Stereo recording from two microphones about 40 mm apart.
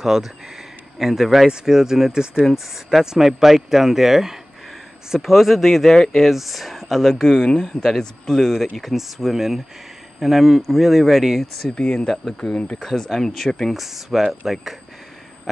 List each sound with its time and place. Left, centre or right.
0.0 s speech: centre
7.3 s speech: centre
11.7 s speech: left
12.4 s speech: centre
13.7 s speech: centre